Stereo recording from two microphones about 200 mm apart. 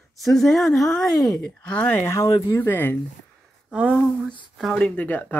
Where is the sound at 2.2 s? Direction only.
25° left (ahead or behind).